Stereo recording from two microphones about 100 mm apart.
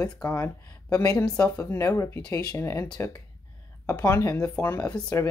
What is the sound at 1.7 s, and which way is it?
A woman's voice, 30° left (ahead or behind).